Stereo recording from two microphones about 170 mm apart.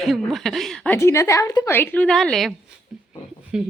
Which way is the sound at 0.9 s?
15° left (ahead or behind).